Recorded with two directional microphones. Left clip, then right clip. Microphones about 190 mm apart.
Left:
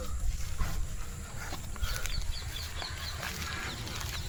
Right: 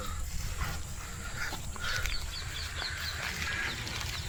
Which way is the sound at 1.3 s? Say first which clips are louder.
Right 5 dB; 5° left (ahead or behind).